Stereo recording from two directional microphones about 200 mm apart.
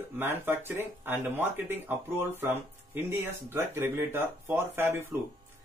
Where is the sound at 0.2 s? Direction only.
10° right (ahead or behind).